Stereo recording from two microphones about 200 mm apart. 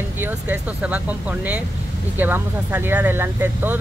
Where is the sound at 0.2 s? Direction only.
10° right (ahead or behind).